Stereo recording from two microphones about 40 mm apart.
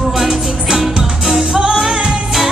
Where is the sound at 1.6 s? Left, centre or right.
Centre.